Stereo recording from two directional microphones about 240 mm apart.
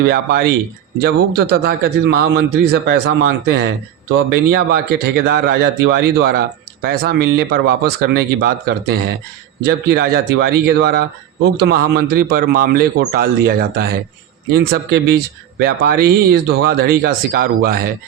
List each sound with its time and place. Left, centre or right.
0.0 s speech: right